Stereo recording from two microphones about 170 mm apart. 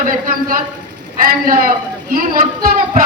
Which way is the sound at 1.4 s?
55° right (ahead or behind).